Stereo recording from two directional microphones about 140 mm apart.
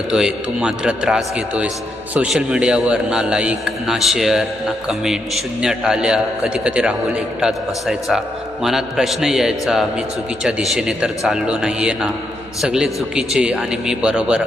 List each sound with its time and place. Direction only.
0.1 s a man's voice: 5° right (ahead or behind)